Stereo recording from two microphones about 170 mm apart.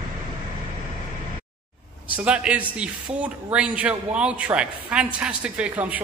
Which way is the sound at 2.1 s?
5° right (ahead or behind).